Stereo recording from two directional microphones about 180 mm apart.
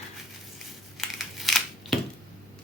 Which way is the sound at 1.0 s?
Centre (ahead or behind).